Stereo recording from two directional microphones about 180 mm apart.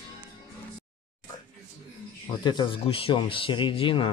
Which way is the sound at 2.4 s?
25° left (ahead or behind).